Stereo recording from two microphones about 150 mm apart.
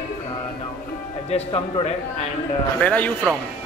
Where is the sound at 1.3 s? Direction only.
40° left (ahead or behind).